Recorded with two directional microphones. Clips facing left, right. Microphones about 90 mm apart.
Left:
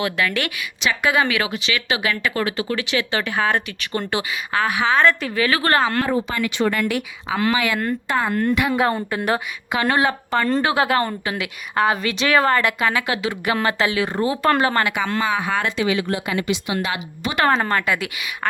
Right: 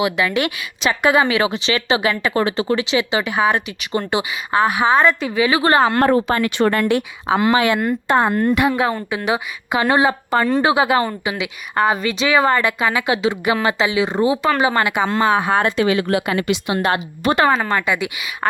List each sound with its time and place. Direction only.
0.0 s a woman's voice: 20° right (ahead or behind)
6.0 s speech: 65° right (ahead or behind)
6.3 s speech: 45° right (ahead or behind)
6.8 s a woman's voice: 30° right (ahead or behind)
7.8 s speech: 15° right (ahead or behind)
8.1 s a woman's voice: 25° right (ahead or behind)
9.0 s speech: 5° right (ahead or behind)
9.9 s a woman's voice: 20° right (ahead or behind)
11.7 s a woman's voice: centre (ahead or behind)
13.1 s a woman's voice: 25° right (ahead or behind)
14.9 s a woman's voice: 30° right (ahead or behind)
15.6 s speech: 45° right (ahead or behind)
16.4 s speech: 60° right (ahead or behind)
17.7 s speech: 15° right (ahead or behind)